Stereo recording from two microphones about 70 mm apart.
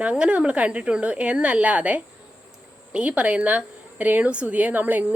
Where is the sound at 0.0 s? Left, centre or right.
Centre.